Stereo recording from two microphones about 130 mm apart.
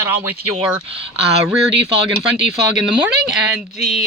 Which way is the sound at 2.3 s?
5° right (ahead or behind).